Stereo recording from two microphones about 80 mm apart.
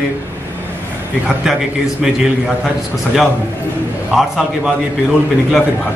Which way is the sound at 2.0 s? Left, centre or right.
Centre.